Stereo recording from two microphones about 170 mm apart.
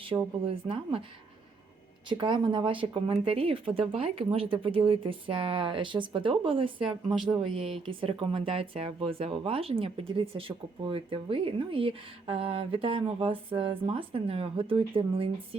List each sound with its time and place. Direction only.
0.0 s speech: 30° right (ahead or behind)
2.0 s speech: 25° right (ahead or behind)